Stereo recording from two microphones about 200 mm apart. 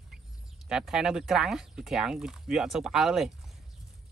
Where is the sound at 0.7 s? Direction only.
5° right (ahead or behind).